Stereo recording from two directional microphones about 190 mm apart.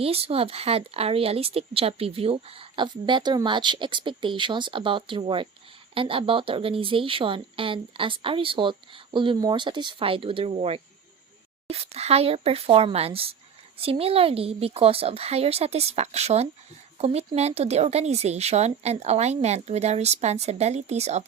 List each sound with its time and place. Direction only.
0.0 s speech: 30° right (ahead or behind)